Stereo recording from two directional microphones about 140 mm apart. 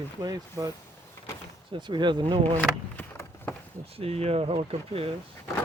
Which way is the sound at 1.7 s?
35° right (ahead or behind).